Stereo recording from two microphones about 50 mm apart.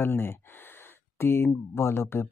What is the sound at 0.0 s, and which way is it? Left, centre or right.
Speech, left.